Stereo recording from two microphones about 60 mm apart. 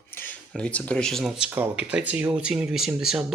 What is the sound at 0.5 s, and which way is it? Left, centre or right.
Speech, centre.